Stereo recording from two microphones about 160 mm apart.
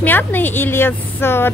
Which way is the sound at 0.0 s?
10° left (ahead or behind).